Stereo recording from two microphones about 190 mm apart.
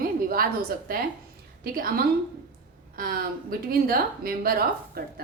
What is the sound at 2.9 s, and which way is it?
A woman's voice, 50° right (ahead or behind).